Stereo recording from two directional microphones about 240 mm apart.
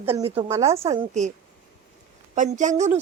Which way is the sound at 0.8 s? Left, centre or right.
Right.